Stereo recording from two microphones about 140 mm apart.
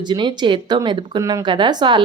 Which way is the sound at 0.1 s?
30° right (ahead or behind).